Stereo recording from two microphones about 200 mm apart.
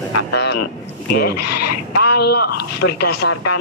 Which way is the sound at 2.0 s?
55° left (ahead or behind).